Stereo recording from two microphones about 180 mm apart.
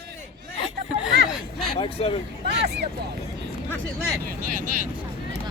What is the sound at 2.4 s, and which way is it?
Speech, 65° right (ahead or behind).